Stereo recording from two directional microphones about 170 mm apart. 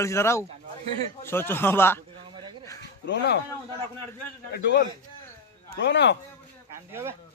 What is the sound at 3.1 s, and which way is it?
Speech, 85° left.